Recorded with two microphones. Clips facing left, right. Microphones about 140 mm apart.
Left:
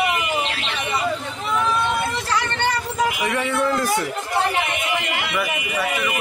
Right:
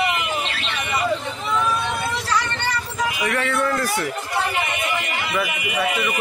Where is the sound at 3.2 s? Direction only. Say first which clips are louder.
Left 1 dB; 15° left (ahead or behind).